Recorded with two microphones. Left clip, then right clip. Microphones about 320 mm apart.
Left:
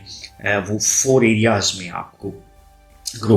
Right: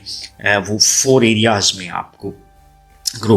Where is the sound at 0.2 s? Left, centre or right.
Right.